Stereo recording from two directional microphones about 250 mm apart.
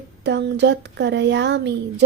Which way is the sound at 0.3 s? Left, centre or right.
Right.